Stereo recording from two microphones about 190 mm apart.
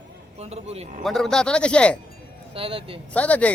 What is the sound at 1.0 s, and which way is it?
Speech, centre (ahead or behind).